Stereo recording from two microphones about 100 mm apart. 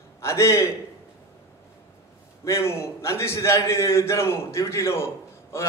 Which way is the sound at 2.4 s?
25° left (ahead or behind).